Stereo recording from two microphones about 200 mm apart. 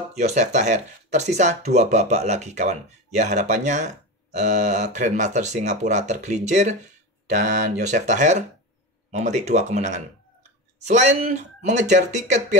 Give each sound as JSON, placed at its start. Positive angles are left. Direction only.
{"t": 0.1, "sound": "speech", "side_deg": -35}
{"t": 7.9, "sound": "speech", "side_deg": -35}